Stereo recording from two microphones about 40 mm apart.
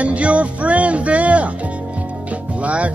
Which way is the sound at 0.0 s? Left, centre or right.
Right.